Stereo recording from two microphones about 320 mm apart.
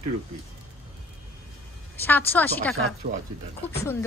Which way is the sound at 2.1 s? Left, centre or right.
Centre.